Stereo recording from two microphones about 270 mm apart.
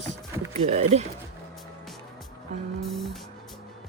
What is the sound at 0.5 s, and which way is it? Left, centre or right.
Speech, right.